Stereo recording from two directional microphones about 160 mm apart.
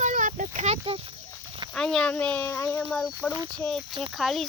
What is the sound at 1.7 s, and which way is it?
Speech, 5° left (ahead or behind).